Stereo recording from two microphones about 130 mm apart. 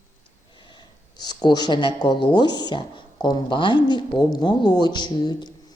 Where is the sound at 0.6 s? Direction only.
35° left (ahead or behind).